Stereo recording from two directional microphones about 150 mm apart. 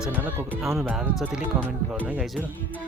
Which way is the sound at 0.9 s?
5° right (ahead or behind).